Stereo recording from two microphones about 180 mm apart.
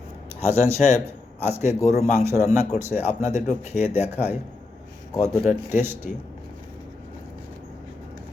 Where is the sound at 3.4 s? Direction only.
40° left (ahead or behind).